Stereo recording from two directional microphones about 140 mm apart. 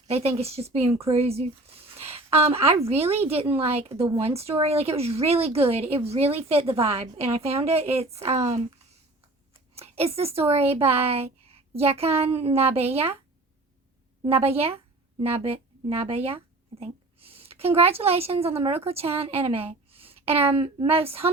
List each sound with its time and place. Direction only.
0.1 s a woman's voice: 45° right (ahead or behind)
9.7 s a woman's voice: 45° right (ahead or behind)
14.2 s a woman's voice: 45° right (ahead or behind)